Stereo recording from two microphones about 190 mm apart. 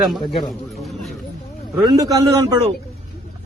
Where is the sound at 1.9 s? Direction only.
20° right (ahead or behind).